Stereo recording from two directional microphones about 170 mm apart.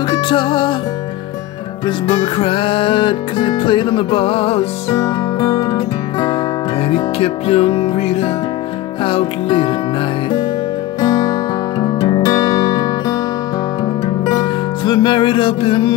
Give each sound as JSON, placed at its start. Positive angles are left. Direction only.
{"t": 0.1, "sound": "music", "side_deg": 30}
{"t": 1.9, "sound": "music", "side_deg": 30}
{"t": 4.9, "sound": "music", "side_deg": 20}
{"t": 11.0, "sound": "music", "side_deg": 25}
{"t": 14.0, "sound": "music", "side_deg": 25}